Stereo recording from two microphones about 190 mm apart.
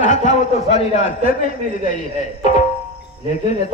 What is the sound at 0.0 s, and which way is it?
Speech, 40° left (ahead or behind).